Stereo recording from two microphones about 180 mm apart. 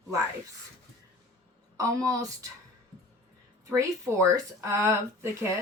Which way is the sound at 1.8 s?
20° right (ahead or behind).